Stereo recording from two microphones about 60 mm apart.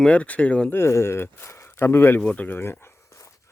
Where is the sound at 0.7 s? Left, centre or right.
Left.